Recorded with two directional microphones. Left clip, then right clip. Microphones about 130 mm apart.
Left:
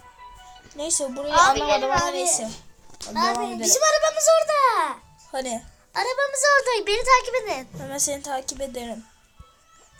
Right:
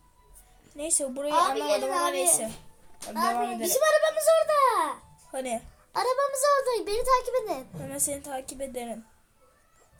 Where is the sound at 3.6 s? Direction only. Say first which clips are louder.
Left 4 dB; 35° right (ahead or behind).